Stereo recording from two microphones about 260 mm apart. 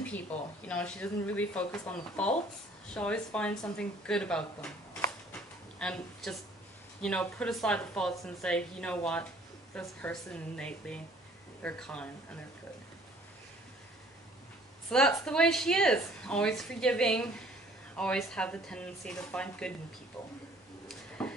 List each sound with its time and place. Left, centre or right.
0.6 s a woman's voice: centre
14.9 s a woman's voice: centre
20.9 s a sound: centre